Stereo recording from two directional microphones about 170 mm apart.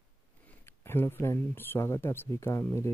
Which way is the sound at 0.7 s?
15° left (ahead or behind).